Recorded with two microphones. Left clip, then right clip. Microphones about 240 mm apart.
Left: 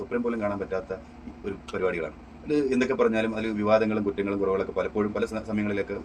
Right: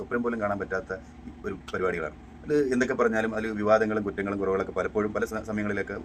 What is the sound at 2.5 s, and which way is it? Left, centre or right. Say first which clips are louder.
A man's voice: even; right.